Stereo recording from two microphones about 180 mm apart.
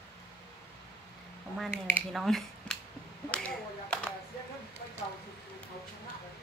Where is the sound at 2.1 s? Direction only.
Centre (ahead or behind).